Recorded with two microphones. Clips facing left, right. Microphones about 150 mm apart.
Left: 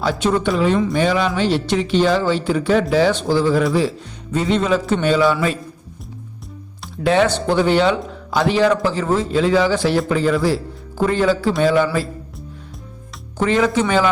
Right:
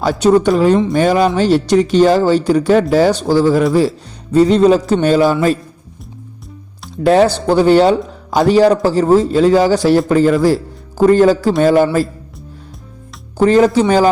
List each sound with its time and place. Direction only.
0.0 s a man's voice: 45° right (ahead or behind)
7.0 s a man's voice: 40° right (ahead or behind)
13.4 s a man's voice: 40° right (ahead or behind)